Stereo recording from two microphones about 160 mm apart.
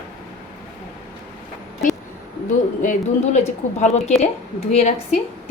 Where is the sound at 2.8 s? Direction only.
50° left (ahead or behind).